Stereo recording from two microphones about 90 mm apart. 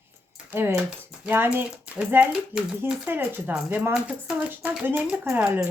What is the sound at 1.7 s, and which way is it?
Speech, 10° right (ahead or behind).